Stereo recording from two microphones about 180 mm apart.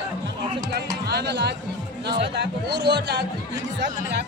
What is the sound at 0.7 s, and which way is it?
Music, 65° right (ahead or behind).